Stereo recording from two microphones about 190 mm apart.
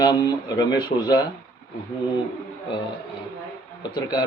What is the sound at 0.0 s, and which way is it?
Speech, 20° left (ahead or behind).